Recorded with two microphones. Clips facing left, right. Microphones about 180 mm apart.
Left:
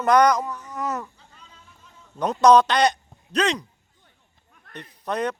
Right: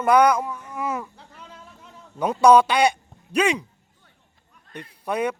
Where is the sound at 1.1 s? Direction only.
75° right (ahead or behind).